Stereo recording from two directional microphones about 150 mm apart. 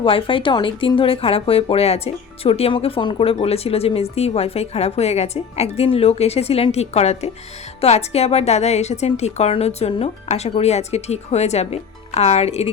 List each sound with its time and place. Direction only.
0.0 s speech: 35° left (ahead or behind)